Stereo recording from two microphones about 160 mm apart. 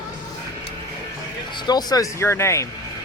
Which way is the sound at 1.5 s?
25° left (ahead or behind).